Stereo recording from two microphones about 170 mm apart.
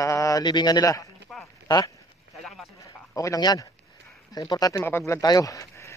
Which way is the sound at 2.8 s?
20° left (ahead or behind).